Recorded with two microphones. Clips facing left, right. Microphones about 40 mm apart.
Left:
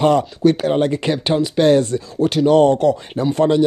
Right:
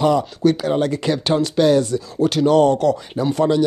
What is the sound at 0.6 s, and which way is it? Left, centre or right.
Speech, left.